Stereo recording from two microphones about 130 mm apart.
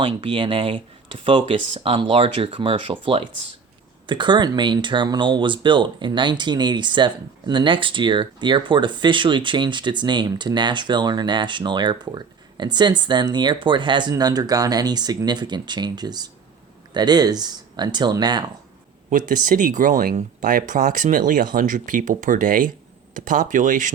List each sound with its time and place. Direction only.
0.0 s speech: 40° right (ahead or behind)
19.1 s speech: 90° right